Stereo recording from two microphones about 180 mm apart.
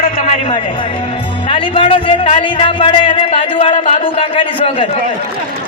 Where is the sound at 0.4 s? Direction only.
25° left (ahead or behind).